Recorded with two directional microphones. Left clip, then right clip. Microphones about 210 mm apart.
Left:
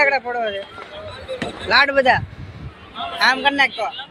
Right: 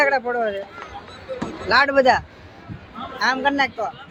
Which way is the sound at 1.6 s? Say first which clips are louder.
Left 1 dB; 20° right (ahead or behind).